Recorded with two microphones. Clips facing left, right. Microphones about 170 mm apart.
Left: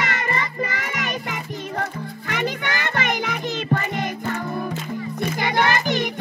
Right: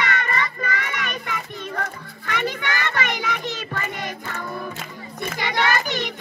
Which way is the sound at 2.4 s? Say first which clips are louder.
Even; 45° left (ahead or behind).